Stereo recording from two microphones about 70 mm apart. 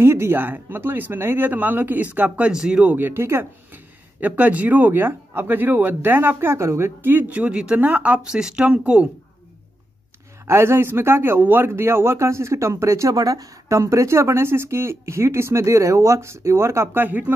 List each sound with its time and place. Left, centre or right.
0.0 s speech: right
2.5 s speech: centre
2.9 s speech: right
10.4 s speech: right